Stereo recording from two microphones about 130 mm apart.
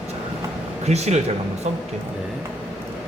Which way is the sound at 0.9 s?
55° right (ahead or behind).